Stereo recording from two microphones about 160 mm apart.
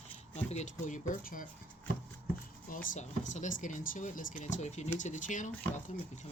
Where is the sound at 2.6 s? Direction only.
60° left (ahead or behind).